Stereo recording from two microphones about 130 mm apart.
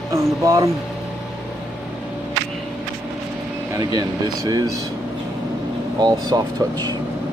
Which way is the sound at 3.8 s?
30° right (ahead or behind).